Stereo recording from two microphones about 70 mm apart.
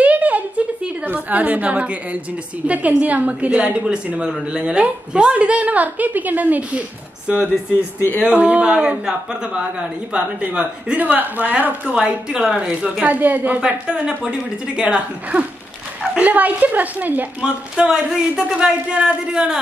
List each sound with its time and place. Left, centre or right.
0.0 s a sound: right
2.6 s a woman's voice: right
13.6 s a woman's voice: centre
17.4 s speech: centre